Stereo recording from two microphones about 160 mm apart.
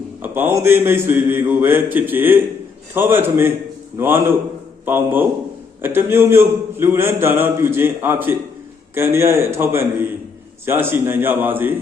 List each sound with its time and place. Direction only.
0.2 s a man's voice: 15° right (ahead or behind)